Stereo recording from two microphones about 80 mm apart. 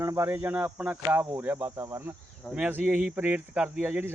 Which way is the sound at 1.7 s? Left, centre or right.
Right.